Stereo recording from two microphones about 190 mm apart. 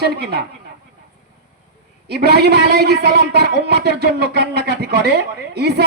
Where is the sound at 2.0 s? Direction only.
60° right (ahead or behind).